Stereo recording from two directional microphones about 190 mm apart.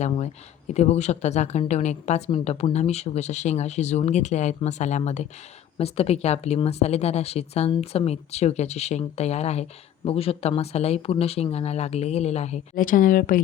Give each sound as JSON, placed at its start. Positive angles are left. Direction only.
{"t": 0.7, "sound": "speech", "side_deg": 35}